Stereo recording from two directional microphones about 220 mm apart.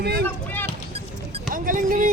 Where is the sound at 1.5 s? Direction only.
40° right (ahead or behind).